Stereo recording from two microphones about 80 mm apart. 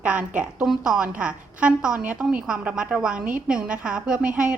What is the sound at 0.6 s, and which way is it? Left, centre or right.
A woman's voice, centre.